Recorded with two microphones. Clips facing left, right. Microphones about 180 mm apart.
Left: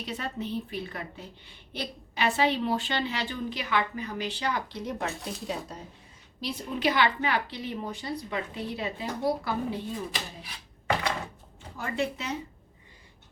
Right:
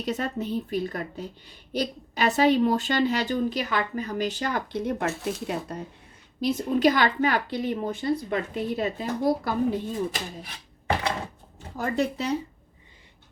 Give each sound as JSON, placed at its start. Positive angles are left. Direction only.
{"t": 0.0, "sound": "a woman's voice", "side_deg": -45}
{"t": 6.4, "sound": "a woman's voice", "side_deg": -45}
{"t": 11.8, "sound": "speech", "side_deg": -40}